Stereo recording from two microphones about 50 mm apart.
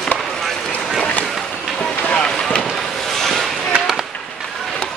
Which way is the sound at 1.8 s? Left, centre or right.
Centre.